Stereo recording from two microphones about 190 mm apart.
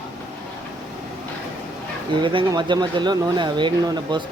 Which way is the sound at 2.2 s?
25° right (ahead or behind).